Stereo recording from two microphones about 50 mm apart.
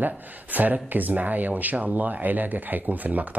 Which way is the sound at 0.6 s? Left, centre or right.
Right.